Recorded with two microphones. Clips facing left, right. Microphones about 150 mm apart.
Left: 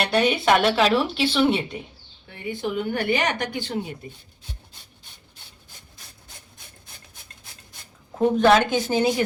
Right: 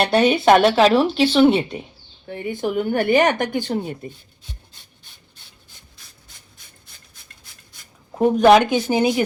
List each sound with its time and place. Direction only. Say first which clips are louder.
0.0 s speech: right 5 dB; 40° right (ahead or behind)
8.4 s speech: right 5 dB; 15° right (ahead or behind)